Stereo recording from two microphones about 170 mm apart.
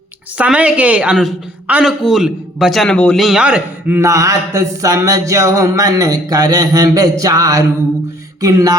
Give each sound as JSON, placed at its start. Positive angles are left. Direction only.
{"t": 0.3, "sound": "speech", "side_deg": -10}